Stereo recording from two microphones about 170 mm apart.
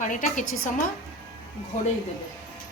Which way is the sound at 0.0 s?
50° left (ahead or behind).